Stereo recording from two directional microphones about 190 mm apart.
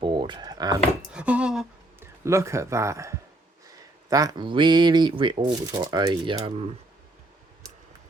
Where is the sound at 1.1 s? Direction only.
5° right (ahead or behind).